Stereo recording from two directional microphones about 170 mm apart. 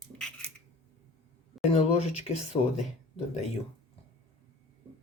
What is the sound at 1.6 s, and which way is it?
Speech, 35° left (ahead or behind).